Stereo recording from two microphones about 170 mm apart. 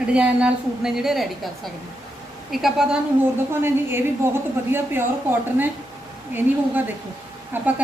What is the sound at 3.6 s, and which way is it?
A woman's voice, 15° right (ahead or behind).